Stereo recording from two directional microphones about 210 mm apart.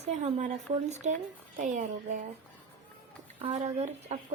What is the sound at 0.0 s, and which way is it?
Speech, 35° right (ahead or behind).